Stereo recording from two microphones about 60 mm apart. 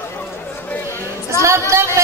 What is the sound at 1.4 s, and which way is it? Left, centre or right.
Speech, right.